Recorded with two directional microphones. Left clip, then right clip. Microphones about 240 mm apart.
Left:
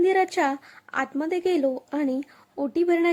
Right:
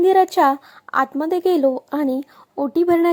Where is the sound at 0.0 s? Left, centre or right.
Centre.